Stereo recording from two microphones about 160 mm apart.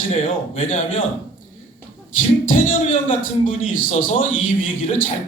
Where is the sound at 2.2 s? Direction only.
55° left (ahead or behind).